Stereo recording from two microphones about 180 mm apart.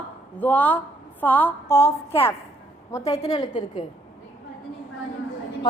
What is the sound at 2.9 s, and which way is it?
Speech, 20° left (ahead or behind).